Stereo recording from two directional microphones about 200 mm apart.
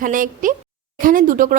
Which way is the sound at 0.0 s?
40° right (ahead or behind).